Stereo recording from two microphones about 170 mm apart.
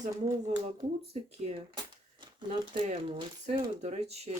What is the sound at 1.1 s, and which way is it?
Speech, 35° right (ahead or behind).